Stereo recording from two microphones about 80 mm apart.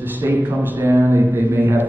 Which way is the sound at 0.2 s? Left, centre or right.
Right.